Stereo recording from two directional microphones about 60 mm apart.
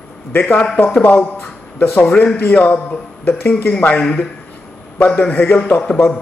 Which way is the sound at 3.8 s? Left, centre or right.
Left.